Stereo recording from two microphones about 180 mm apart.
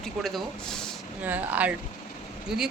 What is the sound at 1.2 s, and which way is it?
A woman's voice, 10° right (ahead or behind).